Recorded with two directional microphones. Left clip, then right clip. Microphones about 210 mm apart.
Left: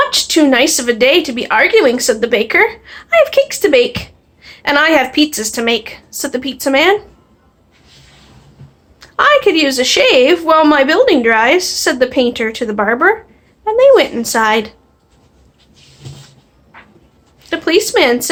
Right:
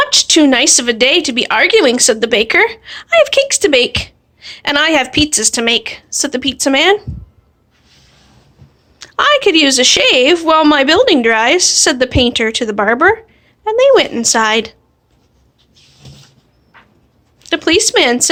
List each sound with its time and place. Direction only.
0.0 s a woman's voice: 45° right (ahead or behind)
9.0 s a woman's voice: 45° right (ahead or behind)
17.4 s a woman's voice: 45° right (ahead or behind)